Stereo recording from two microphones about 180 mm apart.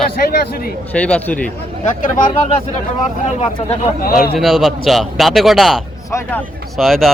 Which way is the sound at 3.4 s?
35° left (ahead or behind).